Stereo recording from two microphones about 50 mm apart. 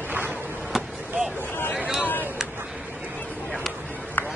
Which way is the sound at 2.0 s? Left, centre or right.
Left.